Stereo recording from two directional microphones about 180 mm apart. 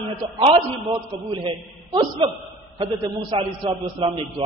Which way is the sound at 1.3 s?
25° right (ahead or behind).